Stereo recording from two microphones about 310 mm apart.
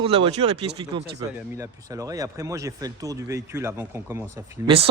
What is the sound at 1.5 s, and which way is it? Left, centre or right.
Speech, centre.